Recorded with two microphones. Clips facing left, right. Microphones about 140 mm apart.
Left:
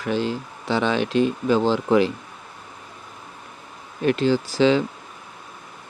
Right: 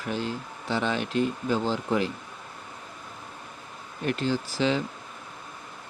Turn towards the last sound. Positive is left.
turn(degrees=90)